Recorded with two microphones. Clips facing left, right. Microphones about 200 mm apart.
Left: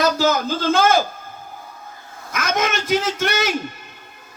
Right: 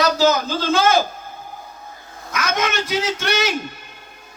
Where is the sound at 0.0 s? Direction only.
50° left (ahead or behind).